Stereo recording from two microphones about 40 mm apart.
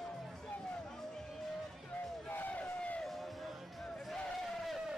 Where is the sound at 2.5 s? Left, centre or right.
Left.